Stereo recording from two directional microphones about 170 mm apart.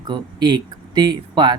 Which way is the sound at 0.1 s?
25° right (ahead or behind).